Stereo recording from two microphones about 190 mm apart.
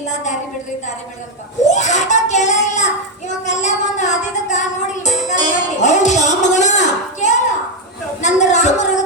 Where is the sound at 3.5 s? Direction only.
40° left (ahead or behind).